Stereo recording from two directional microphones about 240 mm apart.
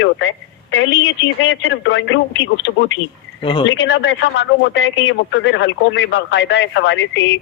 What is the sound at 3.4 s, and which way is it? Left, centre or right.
Speech, left.